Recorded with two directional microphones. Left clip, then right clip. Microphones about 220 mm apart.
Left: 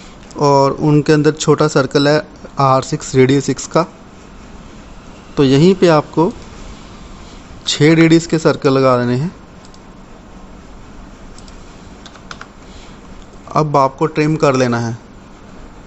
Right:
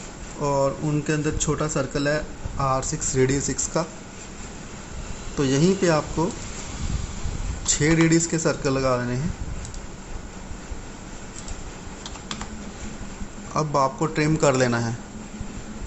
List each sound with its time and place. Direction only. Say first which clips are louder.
0.3 s speech: left 11 dB; 50° left (ahead or behind)
5.3 s speech: left 11 dB; 40° left (ahead or behind)
7.7 s speech: left 10 dB; 40° left (ahead or behind)
13.5 s speech: left 9 dB; 40° left (ahead or behind)